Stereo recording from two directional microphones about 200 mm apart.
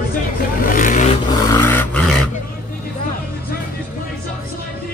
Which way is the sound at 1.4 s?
15° left (ahead or behind).